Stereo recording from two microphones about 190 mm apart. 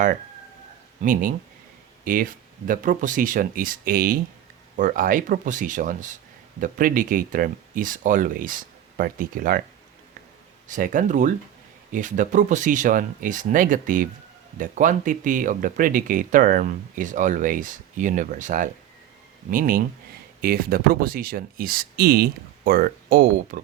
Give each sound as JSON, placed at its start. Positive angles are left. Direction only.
{"t": 1.0, "sound": "speech", "side_deg": -45}
{"t": 10.7, "sound": "speech", "side_deg": -45}